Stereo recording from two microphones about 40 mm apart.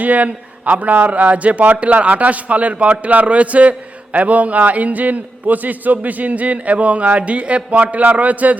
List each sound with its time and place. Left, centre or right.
0.0 s a man's voice: right